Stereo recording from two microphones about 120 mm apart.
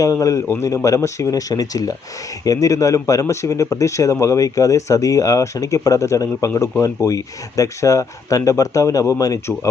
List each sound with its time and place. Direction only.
0.0 s speech: 25° left (ahead or behind)